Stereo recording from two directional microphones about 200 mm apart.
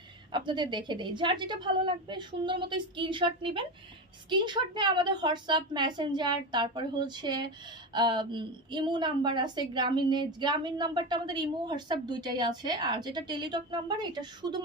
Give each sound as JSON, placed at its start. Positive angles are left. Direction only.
{"t": 0.3, "sound": "a woman's voice", "side_deg": -25}